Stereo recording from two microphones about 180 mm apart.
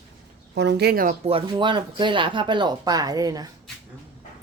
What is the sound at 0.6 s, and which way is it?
Speech, 70° right (ahead or behind).